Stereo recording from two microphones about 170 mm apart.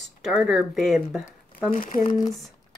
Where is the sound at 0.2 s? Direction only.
Centre (ahead or behind).